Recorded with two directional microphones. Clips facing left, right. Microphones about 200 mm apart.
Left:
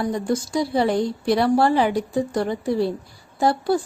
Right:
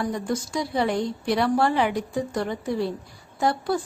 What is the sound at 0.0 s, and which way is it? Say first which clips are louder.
A woman's voice: left 4 dB; 35° left (ahead or behind).